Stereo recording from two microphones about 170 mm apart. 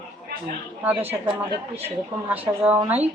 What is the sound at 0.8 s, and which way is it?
Speech, 10° right (ahead or behind).